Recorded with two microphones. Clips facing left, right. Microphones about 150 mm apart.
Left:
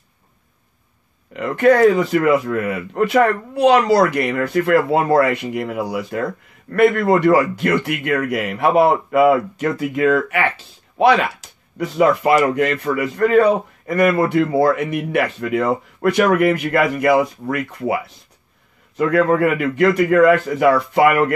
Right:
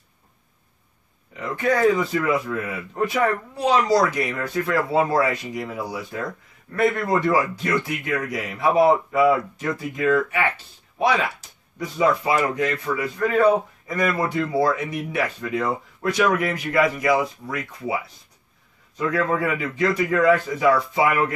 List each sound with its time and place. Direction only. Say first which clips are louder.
1.3 s speech: left 8 dB; 70° left (ahead or behind)
13.8 s speech: left 10 dB; 60° left (ahead or behind)